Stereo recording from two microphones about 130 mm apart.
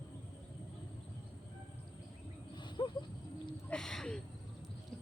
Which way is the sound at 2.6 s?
35° left (ahead or behind).